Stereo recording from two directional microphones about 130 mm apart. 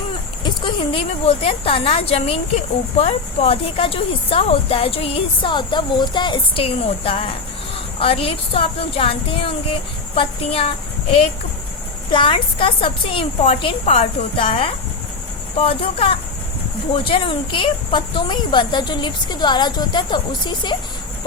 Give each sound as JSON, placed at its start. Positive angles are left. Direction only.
{"t": 0.4, "sound": "speech", "side_deg": 40}
{"t": 12.1, "sound": "speech", "side_deg": 40}